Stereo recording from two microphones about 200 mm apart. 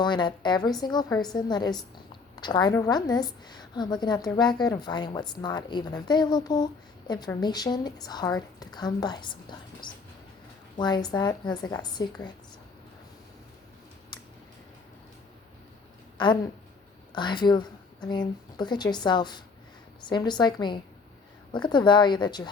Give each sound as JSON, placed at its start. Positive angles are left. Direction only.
{"t": 0.0, "sound": "a woman's voice", "side_deg": 25}
{"t": 14.1, "sound": "typing", "side_deg": 20}
{"t": 16.1, "sound": "a woman's voice", "side_deg": 25}